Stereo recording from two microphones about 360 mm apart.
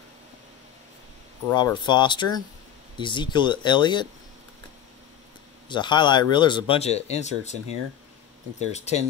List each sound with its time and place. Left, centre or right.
1.5 s speech: centre
5.7 s speech: centre
8.7 s speech: centre